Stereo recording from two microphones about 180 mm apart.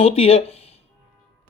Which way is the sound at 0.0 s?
35° left (ahead or behind).